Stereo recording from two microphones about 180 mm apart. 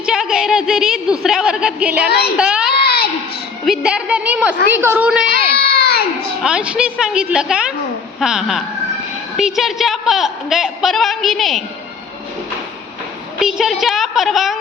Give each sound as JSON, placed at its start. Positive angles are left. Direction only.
{"t": 0.0, "sound": "a woman's voice", "side_deg": -5}
{"t": 2.0, "sound": "a child's voice", "side_deg": 60}
{"t": 2.4, "sound": "a child's voice", "side_deg": -5}
{"t": 2.7, "sound": "child singing", "side_deg": 60}
{"t": 3.7, "sound": "a woman's voice", "side_deg": -5}
{"t": 5.3, "sound": "baby cry", "side_deg": 60}
{"t": 6.4, "sound": "a woman's voice", "side_deg": -5}
{"t": 13.4, "sound": "a woman's voice", "side_deg": 0}